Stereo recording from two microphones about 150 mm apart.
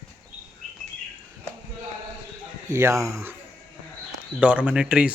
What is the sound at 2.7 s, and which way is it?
Speech, 20° right (ahead or behind).